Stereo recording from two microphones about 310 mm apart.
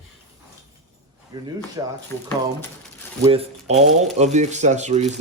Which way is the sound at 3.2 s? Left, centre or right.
Centre.